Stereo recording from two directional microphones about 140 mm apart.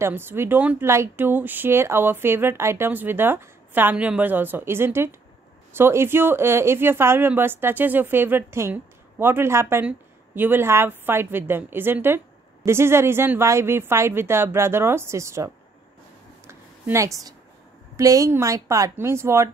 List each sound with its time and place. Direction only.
0.0 s speech: 15° right (ahead or behind)
16.4 s a sound: 20° right (ahead or behind)
17.9 s speech: 25° right (ahead or behind)